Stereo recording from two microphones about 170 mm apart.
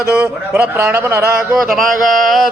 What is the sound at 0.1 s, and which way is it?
Speech, 10° right (ahead or behind).